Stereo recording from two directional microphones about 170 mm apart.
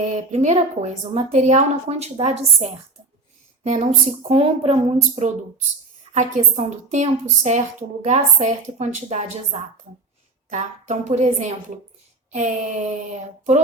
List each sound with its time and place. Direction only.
0.1 s a woman's voice: 45° right (ahead or behind)
6.1 s a woman's voice: 45° right (ahead or behind)